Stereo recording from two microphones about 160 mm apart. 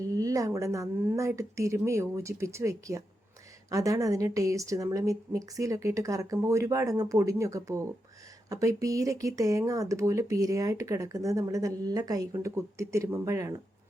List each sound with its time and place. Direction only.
0.0 s speech: 20° right (ahead or behind)